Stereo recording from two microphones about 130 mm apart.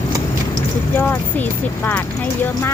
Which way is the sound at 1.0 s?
15° left (ahead or behind).